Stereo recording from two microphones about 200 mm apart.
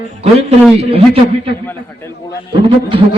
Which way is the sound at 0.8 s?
30° right (ahead or behind).